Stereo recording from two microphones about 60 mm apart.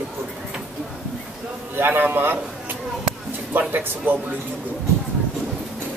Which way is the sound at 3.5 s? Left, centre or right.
Right.